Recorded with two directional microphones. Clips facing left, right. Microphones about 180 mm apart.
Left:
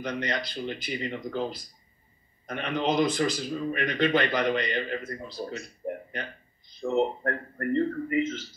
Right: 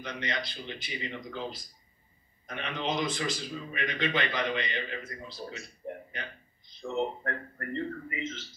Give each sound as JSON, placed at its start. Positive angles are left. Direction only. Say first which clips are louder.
{"t": 0.0, "sound": "a man's voice", "louder": "left 5 dB", "side_deg": 40}
{"t": 5.8, "sound": "a sound", "louder": "left 6 dB", "side_deg": 45}
{"t": 6.8, "sound": "a man's voice", "louder": "left 6 dB", "side_deg": 40}